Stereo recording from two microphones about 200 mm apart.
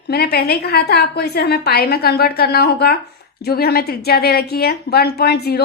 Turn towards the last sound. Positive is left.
turn(degrees=55)  # may be behind; listen again after turning